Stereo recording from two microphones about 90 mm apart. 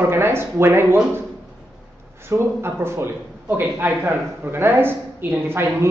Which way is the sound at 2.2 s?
30° right (ahead or behind).